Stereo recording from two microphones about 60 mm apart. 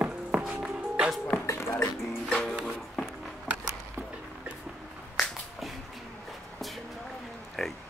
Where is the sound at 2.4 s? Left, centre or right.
Centre.